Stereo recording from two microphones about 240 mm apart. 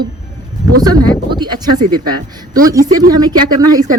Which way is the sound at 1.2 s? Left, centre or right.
Centre.